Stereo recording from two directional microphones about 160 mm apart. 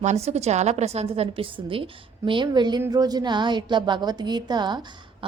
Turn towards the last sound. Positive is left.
turn(degrees=-30)  # may be behind; listen again after turning